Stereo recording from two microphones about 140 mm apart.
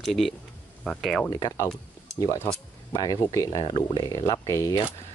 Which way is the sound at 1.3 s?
25° left (ahead or behind).